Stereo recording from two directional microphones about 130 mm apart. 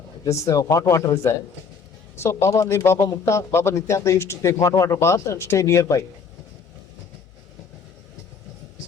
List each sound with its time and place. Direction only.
0.4 s speech: 25° left (ahead or behind)